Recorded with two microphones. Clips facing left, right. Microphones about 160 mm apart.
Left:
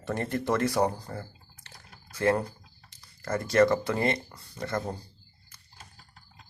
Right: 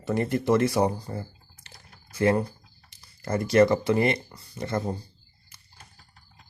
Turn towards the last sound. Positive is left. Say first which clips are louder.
# right 3 dB
turn(degrees=-20)  # may be behind; listen again after turning